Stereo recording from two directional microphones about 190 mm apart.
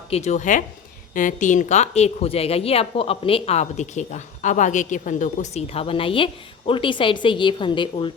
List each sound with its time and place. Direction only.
0.1 s a woman's voice: 35° left (ahead or behind)